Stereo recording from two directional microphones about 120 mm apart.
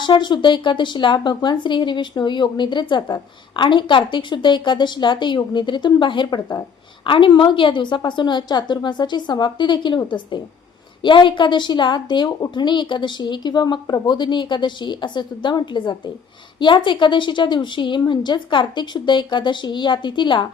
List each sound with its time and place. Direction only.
0.0 s speech: 40° left (ahead or behind)